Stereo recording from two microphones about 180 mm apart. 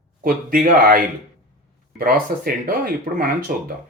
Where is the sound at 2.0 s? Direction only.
55° right (ahead or behind).